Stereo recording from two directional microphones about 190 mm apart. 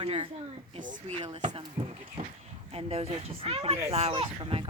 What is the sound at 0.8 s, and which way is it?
Speech, 40° right (ahead or behind).